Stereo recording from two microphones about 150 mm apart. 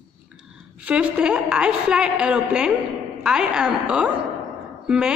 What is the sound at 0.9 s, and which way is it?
A woman's voice, 10° right (ahead or behind).